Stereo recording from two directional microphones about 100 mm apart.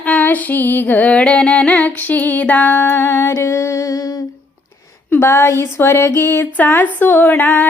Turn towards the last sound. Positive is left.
turn(degrees=20)  # may be behind; listen again after turning